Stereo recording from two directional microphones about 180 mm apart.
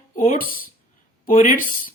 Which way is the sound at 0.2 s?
50° left (ahead or behind).